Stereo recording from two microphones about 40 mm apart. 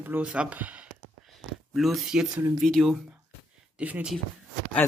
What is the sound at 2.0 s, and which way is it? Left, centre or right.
Speech, centre.